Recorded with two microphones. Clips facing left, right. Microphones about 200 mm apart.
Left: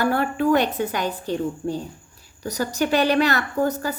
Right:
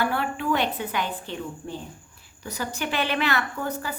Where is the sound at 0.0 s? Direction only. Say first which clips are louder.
Left 6 dB; 45° left (ahead or behind).